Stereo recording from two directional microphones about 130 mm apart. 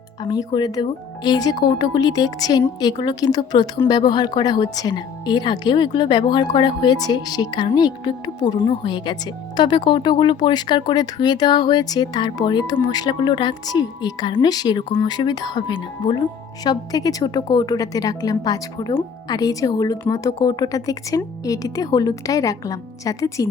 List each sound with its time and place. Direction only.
0.2 s a woman's voice: 30° left (ahead or behind)